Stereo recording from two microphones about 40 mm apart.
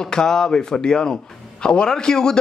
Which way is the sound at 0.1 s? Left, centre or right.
Centre.